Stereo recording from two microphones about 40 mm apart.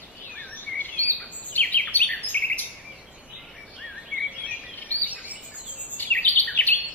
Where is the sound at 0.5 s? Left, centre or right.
Left.